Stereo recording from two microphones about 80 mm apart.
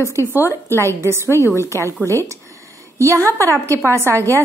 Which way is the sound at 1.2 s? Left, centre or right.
Left.